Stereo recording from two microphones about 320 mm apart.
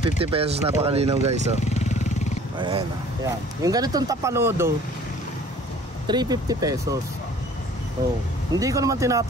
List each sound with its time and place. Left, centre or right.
0.0 s speech: centre
1.6 s vehicle: left
2.5 s speech: centre
6.0 s speech: centre
8.5 s speech: centre